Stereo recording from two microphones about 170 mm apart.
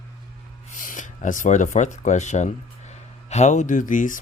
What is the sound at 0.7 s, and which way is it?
Speech, 50° left (ahead or behind).